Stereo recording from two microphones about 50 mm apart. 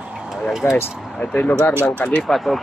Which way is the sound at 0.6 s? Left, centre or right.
Left.